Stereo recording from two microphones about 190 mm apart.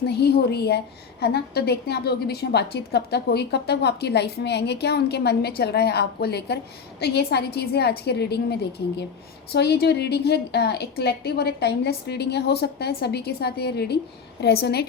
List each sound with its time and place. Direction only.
0.0 s a woman's voice: 60° left (ahead or behind)